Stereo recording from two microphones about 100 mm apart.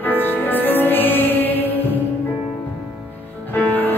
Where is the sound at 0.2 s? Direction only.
20° left (ahead or behind).